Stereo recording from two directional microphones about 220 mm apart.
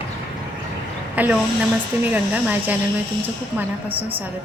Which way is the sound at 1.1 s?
5° right (ahead or behind).